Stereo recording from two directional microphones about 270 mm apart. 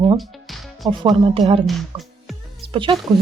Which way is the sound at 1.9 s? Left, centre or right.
Centre.